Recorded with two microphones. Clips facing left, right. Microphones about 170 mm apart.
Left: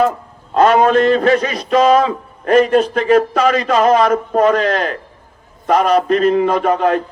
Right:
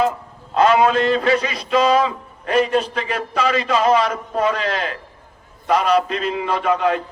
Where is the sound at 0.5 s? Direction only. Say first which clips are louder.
Left 4 dB; 50° left (ahead or behind).